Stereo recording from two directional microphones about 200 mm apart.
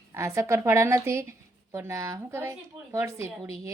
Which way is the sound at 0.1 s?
15° right (ahead or behind).